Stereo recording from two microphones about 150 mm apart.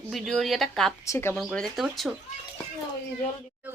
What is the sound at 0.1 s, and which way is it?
Speech, centre (ahead or behind).